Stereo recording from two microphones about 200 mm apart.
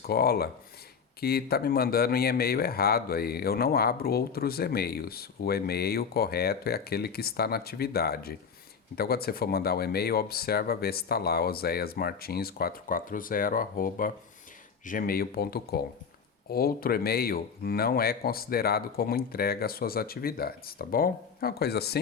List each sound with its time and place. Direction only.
0.1 s speech: 50° left (ahead or behind)